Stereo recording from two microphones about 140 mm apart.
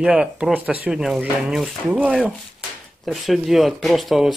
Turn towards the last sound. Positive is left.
turn(degrees=0)  # may be behind; listen again after turning